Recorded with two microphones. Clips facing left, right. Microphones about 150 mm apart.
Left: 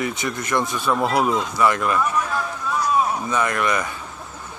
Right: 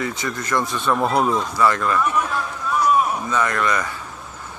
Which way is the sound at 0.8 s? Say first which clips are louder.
Right 2 dB; 5° left (ahead or behind).